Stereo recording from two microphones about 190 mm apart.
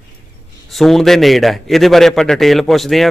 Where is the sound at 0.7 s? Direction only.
Centre (ahead or behind).